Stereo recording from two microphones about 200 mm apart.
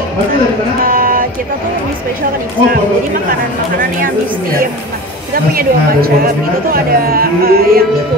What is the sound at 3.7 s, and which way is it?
Music, 45° right (ahead or behind).